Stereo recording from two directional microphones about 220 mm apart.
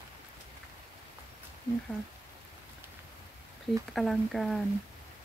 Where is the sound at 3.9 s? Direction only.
Centre (ahead or behind).